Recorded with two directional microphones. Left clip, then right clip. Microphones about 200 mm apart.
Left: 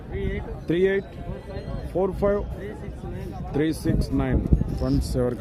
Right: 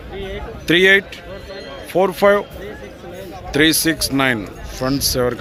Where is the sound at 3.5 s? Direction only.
5° right (ahead or behind).